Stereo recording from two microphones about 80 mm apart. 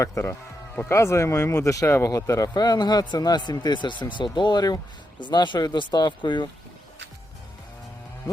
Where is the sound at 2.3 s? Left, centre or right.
Left.